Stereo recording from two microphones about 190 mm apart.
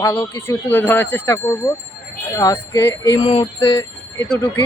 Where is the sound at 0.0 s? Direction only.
15° left (ahead or behind).